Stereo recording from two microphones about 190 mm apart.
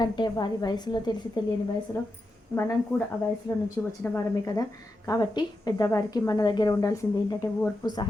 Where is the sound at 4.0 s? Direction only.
15° left (ahead or behind).